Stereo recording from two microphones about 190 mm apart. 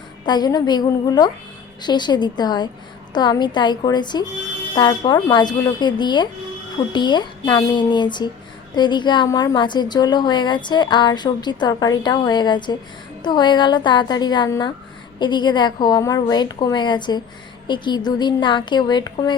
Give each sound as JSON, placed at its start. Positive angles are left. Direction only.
{"t": 0.3, "sound": "a woman's voice", "side_deg": 20}